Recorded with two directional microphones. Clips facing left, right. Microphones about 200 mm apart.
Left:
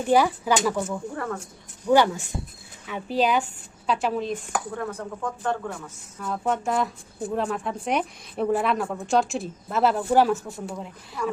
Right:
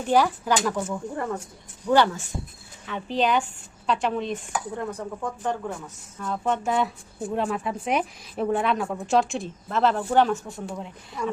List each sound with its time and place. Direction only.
0.1 s speech: 10° left (ahead or behind)
1.1 s speech: 15° right (ahead or behind)
1.9 s a woman's voice: 10° left (ahead or behind)
4.8 s speech: 15° right (ahead or behind)
6.1 s a woman's voice: 5° left (ahead or behind)